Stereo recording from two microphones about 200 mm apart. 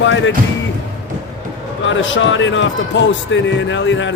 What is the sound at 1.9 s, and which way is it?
Speech, 70° left (ahead or behind).